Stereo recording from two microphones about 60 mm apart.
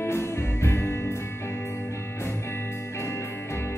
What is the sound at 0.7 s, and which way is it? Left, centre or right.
Music, left.